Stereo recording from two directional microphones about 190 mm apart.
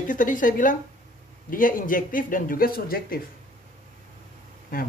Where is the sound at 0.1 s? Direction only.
45° left (ahead or behind).